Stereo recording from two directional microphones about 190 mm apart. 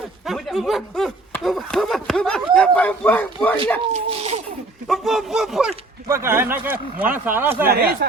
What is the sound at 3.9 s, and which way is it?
Speech, 35° right (ahead or behind).